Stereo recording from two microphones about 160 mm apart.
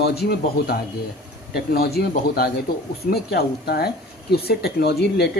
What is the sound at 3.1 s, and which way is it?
A man's voice, 85° left.